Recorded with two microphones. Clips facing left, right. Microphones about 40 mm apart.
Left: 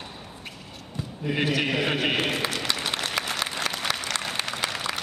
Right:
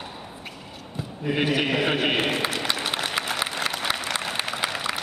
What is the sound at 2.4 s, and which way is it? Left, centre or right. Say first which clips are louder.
Applause: right 2 dB; centre.